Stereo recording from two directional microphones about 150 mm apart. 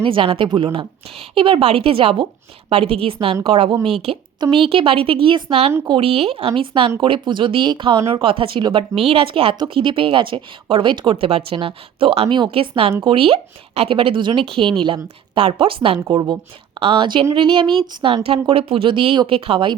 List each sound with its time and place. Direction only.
0.0 s a woman's voice: 35° right (ahead or behind)